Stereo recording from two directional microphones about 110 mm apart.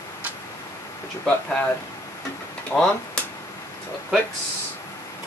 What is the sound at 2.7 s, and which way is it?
Speech, 10° left (ahead or behind).